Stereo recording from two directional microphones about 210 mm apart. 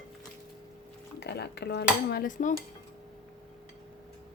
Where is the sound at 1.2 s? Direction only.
50° left (ahead or behind).